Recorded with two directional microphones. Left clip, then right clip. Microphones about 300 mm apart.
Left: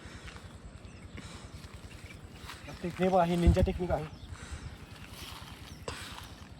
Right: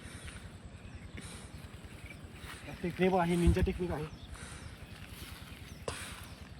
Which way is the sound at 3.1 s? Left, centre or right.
Centre.